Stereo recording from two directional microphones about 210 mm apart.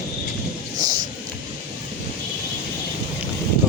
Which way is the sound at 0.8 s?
20° right (ahead or behind).